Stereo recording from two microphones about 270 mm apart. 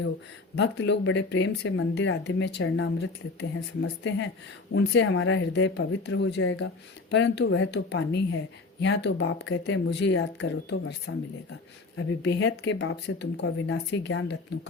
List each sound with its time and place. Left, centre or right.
0.5 s speech: left